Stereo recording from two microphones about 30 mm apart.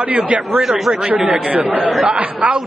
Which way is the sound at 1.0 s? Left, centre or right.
Right.